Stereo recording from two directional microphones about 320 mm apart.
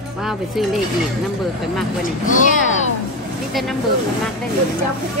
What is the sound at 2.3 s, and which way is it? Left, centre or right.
Speech, left.